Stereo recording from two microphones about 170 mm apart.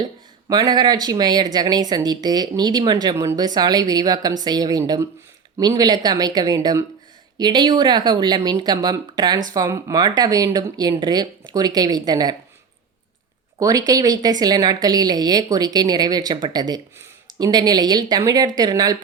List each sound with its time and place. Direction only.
0.0 s speech: 25° right (ahead or behind)
13.6 s speech: 20° right (ahead or behind)